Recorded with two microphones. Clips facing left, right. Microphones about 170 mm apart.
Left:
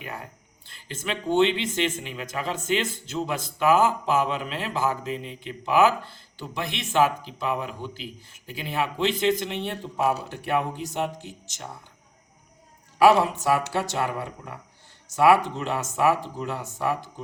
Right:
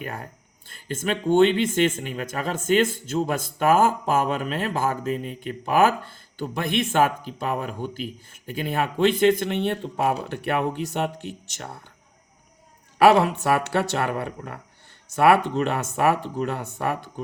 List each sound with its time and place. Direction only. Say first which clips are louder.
0.0 s speech: right 3 dB; 50° right (ahead or behind)
13.0 s speech: right 2 dB; 60° right (ahead or behind)